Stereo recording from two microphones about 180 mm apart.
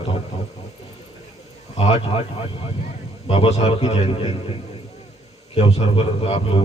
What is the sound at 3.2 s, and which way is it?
A man's voice, 35° left (ahead or behind).